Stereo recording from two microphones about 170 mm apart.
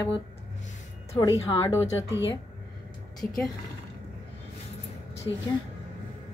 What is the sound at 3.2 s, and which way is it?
Speech, 10° left (ahead or behind).